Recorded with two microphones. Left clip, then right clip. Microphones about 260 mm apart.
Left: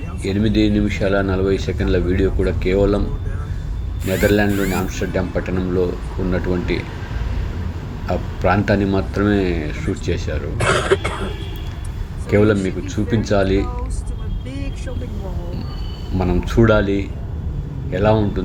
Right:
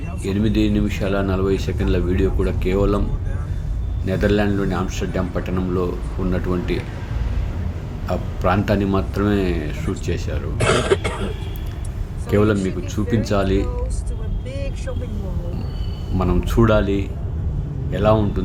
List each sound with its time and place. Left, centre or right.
0.3 s speech: centre
4.0 s speech: centre
8.0 s speech: centre
12.3 s speech: centre
16.1 s speech: centre